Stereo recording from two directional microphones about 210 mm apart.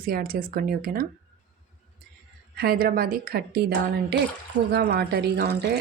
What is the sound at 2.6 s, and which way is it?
Speech, 45° right (ahead or behind).